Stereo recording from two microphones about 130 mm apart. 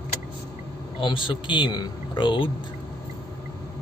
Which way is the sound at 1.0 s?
40° left (ahead or behind).